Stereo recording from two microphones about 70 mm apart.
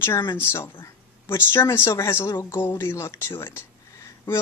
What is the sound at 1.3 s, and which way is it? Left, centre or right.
Speech, left.